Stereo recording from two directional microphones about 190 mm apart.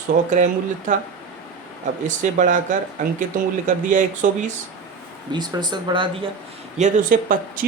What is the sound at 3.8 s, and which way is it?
Speech, 40° right (ahead or behind).